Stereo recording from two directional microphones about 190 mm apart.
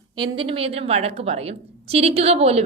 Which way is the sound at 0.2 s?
30° right (ahead or behind).